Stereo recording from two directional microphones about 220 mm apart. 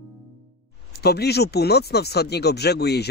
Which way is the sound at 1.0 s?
45° left (ahead or behind).